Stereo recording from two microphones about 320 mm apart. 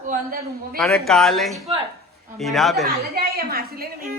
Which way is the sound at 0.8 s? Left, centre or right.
Centre.